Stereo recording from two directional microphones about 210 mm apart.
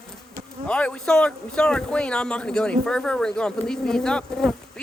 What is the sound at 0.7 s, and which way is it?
Speech, 5° left (ahead or behind).